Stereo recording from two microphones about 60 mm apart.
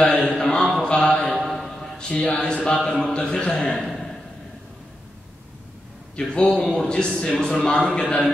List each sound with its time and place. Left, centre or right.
0.0 s mantra: centre
0.8 s a sound: centre
1.5 s speech: centre
3.8 s a sound: centre
6.1 s a man's voice: centre
7.9 s mantra: left